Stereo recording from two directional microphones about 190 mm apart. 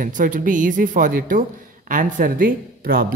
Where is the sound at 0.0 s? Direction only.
45° right (ahead or behind).